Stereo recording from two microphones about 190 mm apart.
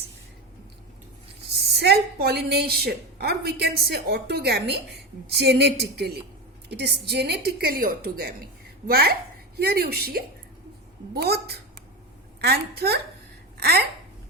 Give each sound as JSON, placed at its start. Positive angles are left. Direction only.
{"t": 1.5, "sound": "a woman's voice", "side_deg": -60}